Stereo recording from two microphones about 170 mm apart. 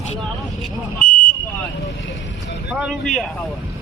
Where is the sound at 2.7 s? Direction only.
5° right (ahead or behind).